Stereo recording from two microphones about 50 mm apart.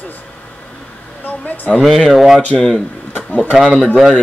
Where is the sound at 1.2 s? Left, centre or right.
Left.